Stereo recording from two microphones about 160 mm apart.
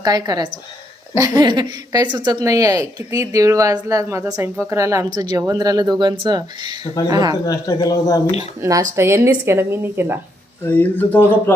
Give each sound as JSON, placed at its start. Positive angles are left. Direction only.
{"t": 0.0, "sound": "speech", "side_deg": -25}
{"t": 7.4, "sound": "speech", "side_deg": 20}
{"t": 8.4, "sound": "speech", "side_deg": -20}
{"t": 10.6, "sound": "speech", "side_deg": 10}